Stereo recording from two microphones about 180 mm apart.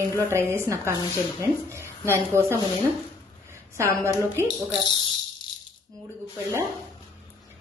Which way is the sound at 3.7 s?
15° right (ahead or behind).